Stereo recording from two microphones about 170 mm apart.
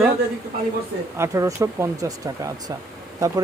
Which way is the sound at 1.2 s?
20° right (ahead or behind).